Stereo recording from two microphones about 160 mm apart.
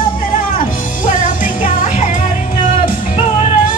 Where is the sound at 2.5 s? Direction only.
55° left (ahead or behind).